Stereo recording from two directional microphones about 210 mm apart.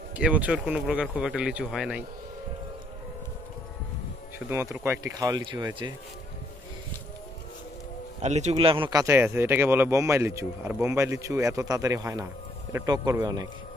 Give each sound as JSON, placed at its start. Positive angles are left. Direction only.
{"t": 0.1, "sound": "speech", "side_deg": -5}
{"t": 4.5, "sound": "speech", "side_deg": -10}
{"t": 8.2, "sound": "speech", "side_deg": -30}